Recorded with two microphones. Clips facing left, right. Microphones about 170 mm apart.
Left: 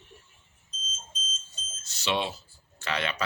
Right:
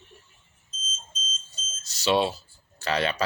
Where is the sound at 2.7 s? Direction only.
35° right (ahead or behind).